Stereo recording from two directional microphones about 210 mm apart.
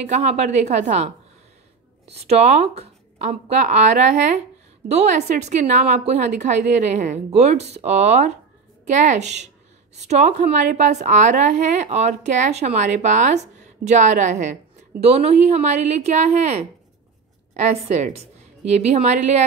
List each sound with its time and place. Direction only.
0.0 s a woman's voice: 35° right (ahead or behind)
2.1 s a woman's voice: 30° right (ahead or behind)